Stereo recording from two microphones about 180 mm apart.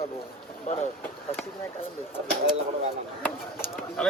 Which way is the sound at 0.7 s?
40° left (ahead or behind).